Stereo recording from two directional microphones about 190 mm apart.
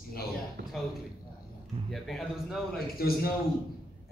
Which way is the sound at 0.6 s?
65° right (ahead or behind).